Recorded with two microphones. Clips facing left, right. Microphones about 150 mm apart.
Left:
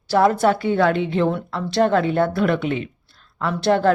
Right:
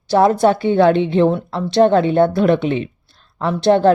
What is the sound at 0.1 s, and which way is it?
A woman's voice, 25° right (ahead or behind).